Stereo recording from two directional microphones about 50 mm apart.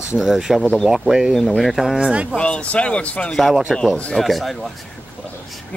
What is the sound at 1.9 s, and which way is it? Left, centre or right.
Speech, centre.